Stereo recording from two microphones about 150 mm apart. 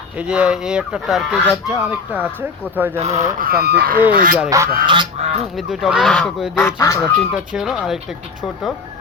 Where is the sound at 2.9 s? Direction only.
50° right (ahead or behind); by 4.0 s 90° right.